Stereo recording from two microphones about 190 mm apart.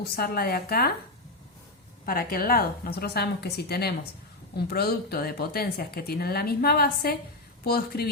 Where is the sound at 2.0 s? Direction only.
50° left (ahead or behind).